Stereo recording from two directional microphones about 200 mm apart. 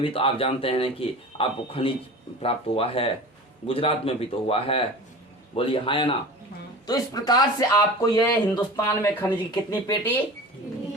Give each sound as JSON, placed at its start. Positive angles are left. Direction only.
{"t": 0.0, "sound": "speech", "side_deg": 25}